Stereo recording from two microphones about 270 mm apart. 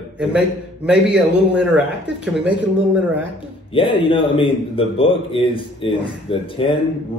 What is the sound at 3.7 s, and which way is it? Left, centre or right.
A man's voice, centre.